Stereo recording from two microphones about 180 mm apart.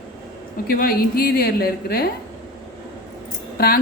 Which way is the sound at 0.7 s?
55° left (ahead or behind).